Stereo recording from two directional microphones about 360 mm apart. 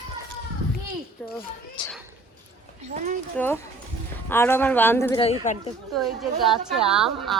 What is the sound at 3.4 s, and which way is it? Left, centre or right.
A woman's voice, centre.